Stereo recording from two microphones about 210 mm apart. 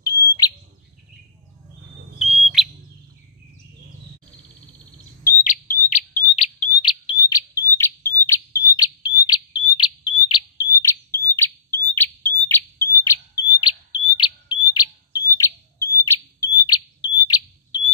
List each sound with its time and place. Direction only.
2.1 s bird: centre (ahead or behind)
5.2 s bird: 35° left (ahead or behind); by 17.4 s 20° left (ahead or behind)